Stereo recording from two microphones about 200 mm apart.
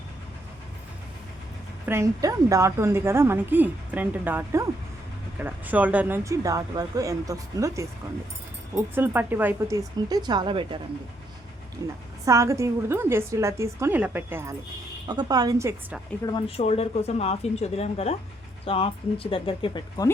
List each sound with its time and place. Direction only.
1.9 s a woman's voice: 15° right (ahead or behind)
11.8 s a woman's voice: 15° right (ahead or behind)
16.6 s speech: 30° left (ahead or behind)